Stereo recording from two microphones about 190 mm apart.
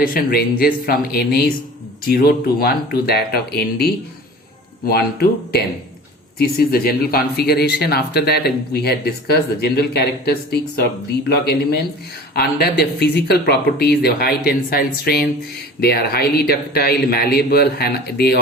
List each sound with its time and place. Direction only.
0.1 s speech: 55° left (ahead or behind)